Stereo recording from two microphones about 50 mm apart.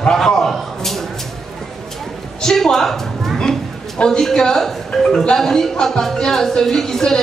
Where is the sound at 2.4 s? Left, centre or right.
Centre.